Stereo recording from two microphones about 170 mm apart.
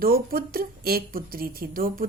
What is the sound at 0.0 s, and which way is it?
A woman's voice, 60° right (ahead or behind).